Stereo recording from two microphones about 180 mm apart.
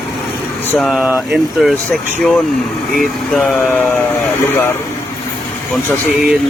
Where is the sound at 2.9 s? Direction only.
Centre (ahead or behind).